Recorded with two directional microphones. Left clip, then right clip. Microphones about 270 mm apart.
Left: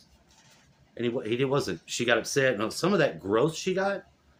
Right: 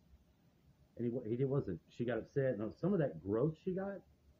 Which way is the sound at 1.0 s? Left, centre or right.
Centre.